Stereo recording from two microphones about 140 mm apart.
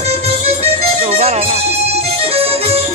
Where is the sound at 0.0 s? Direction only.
50° right (ahead or behind).